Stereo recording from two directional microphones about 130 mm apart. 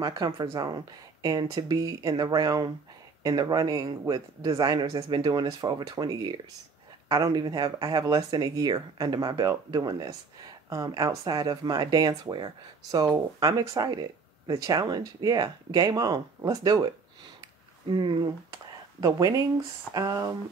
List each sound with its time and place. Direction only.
0.0 s speech: 35° right (ahead or behind)
17.4 s a sound: 35° right (ahead or behind)
18.9 s speech: 25° right (ahead or behind)